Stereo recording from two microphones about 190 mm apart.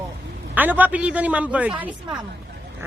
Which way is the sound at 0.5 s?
10° right (ahead or behind).